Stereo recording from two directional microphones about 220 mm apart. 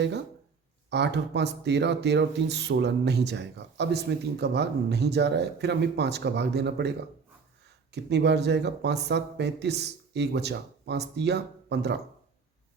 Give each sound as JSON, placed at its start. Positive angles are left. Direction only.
{"t": 0.9, "sound": "speech", "side_deg": -50}
{"t": 7.9, "sound": "speech", "side_deg": -50}